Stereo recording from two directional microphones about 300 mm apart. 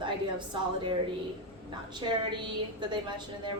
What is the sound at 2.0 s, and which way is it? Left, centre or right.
A woman's voice, centre.